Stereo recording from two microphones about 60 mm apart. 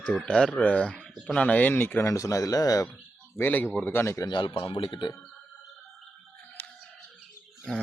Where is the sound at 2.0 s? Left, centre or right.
Left.